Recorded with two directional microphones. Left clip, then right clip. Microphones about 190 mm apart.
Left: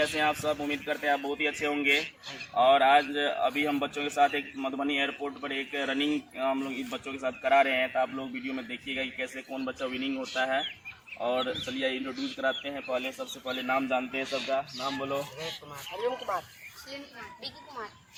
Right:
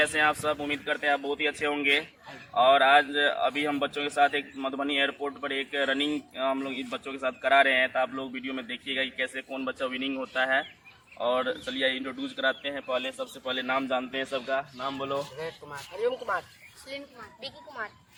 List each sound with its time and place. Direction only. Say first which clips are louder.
0.1 s a man's voice: right 3 dB; 5° right (ahead or behind)
3.7 s a man's voice: right 1 dB; 15° right (ahead or behind)
4.8 s speech: right 3 dB; centre (ahead or behind)
13.1 s speech: right 3 dB; 5° right (ahead or behind)